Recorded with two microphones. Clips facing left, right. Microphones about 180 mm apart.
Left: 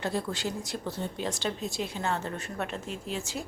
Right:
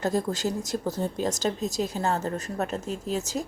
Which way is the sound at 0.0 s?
40° right (ahead or behind).